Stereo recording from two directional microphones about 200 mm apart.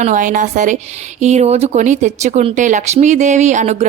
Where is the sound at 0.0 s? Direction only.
40° right (ahead or behind).